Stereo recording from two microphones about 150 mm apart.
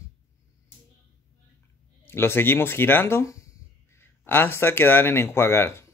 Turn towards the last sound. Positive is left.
turn(degrees=15)  # may be behind; listen again after turning